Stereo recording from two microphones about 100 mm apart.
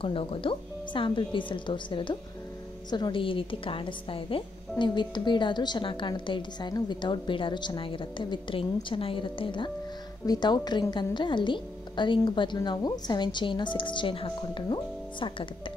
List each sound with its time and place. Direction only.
0.0 s a woman's voice: 65° left (ahead or behind)
10.2 s a woman's voice: 45° left (ahead or behind)